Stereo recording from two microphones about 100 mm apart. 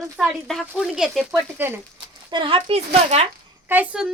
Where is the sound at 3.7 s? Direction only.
20° right (ahead or behind).